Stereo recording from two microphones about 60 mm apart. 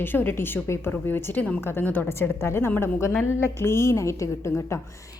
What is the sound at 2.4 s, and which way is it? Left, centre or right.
A woman's voice, left.